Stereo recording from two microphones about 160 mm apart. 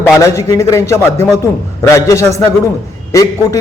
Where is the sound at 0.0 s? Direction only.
20° left (ahead or behind).